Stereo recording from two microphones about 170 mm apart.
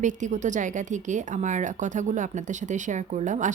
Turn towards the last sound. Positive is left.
turn(degrees=-45)  # may be behind; listen again after turning